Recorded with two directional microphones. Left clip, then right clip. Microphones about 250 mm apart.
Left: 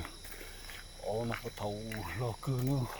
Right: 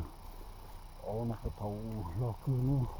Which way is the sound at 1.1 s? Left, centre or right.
Centre.